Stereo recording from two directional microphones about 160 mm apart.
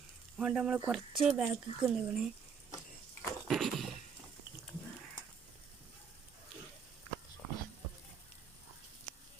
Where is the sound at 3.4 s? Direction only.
Centre (ahead or behind).